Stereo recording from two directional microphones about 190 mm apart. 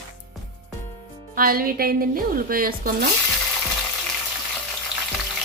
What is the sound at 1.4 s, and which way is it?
Speech, 50° right (ahead or behind).